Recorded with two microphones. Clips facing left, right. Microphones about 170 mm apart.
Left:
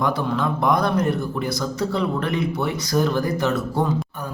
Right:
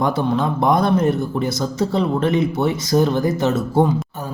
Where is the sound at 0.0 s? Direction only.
25° right (ahead or behind).